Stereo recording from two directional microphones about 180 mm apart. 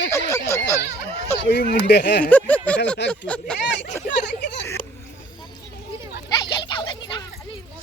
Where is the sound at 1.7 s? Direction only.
70° left (ahead or behind).